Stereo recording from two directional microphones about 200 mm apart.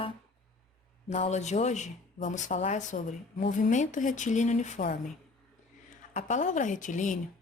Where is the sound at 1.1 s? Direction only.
35° left (ahead or behind).